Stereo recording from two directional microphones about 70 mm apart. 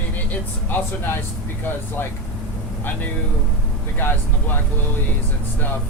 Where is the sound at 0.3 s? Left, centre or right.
Left.